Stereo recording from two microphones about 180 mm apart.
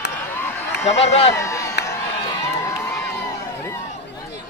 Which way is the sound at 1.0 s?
35° left (ahead or behind).